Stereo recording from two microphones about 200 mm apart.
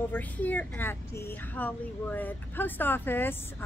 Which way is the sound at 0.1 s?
10° left (ahead or behind).